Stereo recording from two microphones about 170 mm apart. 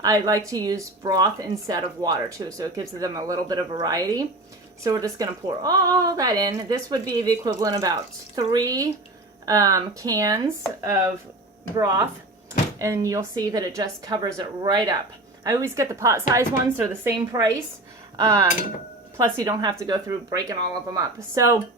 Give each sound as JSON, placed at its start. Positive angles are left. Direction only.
{"t": 0.0, "sound": "a woman's voice", "side_deg": -20}